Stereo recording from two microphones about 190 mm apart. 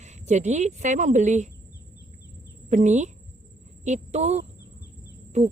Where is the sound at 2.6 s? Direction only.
40° right (ahead or behind).